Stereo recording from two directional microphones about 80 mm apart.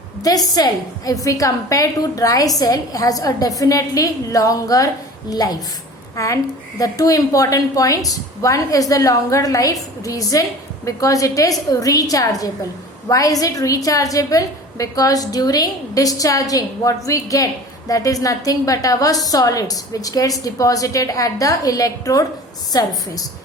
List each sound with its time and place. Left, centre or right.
0.2 s a woman's voice: left
6.1 s a woman's voice: left